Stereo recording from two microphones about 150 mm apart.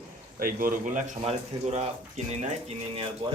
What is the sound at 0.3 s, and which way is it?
Speech, 70° right (ahead or behind).